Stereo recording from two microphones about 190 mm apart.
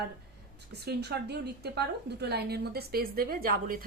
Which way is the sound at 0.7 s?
60° right (ahead or behind).